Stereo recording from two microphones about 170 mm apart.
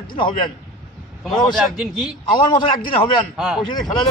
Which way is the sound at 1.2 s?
Centre (ahead or behind).